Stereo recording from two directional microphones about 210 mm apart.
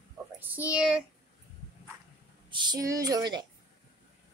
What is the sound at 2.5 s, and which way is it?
Speech, 20° right (ahead or behind).